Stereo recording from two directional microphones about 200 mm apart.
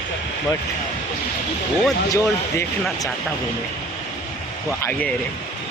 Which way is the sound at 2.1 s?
15° left (ahead or behind).